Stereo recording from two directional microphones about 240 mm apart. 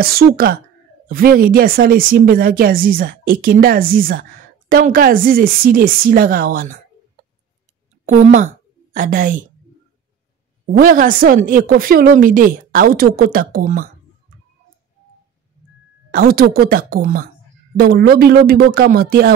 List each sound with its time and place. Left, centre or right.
0.0 s a woman's voice: right
8.0 s a woman's voice: right
10.7 s a woman's voice: right
16.1 s a woman's voice: right